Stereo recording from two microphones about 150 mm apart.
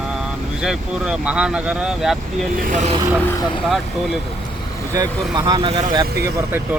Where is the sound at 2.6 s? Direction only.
60° right (ahead or behind).